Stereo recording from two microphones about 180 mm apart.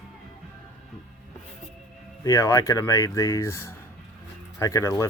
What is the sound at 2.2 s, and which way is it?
Speech, 15° left (ahead or behind).